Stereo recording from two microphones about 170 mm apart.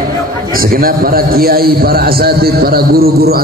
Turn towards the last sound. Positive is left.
turn(degrees=-65)  # may be behind; listen again after turning